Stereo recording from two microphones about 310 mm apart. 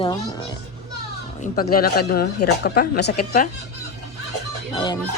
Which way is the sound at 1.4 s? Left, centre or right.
Left.